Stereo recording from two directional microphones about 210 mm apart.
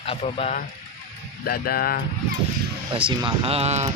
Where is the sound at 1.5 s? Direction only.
45° left (ahead or behind).